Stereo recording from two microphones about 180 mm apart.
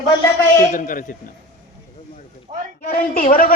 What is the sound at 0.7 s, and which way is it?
Speech, 45° left (ahead or behind).